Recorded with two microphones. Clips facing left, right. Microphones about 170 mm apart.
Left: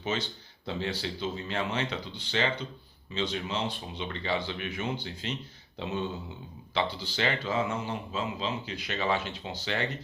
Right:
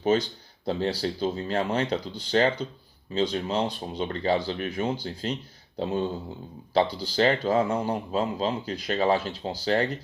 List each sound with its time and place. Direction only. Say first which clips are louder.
0.0 s speech: right 9 dB; 40° right (ahead or behind)